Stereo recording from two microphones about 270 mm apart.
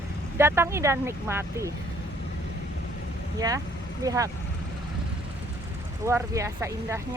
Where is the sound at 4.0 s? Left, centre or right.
Centre.